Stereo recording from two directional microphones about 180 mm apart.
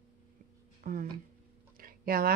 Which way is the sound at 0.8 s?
50° right (ahead or behind).